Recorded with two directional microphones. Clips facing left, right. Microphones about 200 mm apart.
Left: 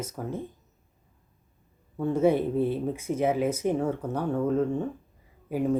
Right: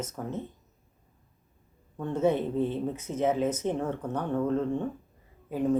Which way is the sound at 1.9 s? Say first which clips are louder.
Left 3 dB; 10° left (ahead or behind).